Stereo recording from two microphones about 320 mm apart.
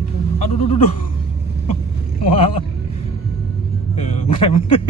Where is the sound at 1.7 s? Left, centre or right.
Centre.